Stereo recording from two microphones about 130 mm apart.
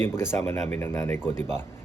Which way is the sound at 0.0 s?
20° left (ahead or behind).